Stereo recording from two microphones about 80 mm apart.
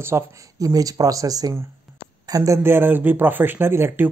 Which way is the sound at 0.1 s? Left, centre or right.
Right.